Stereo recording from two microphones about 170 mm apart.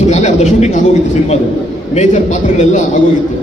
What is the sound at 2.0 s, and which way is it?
Speech, 45° left (ahead or behind).